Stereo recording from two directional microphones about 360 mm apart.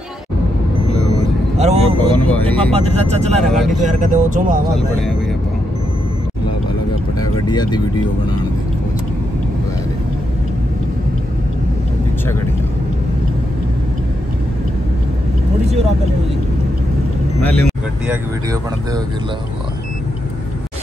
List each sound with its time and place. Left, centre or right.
1.6 s speech: centre
2.1 s speech: centre
2.7 s speech: centre
3.5 s speech: centre
3.8 s speech: centre
7.2 s a sound: centre
17.4 s speech: centre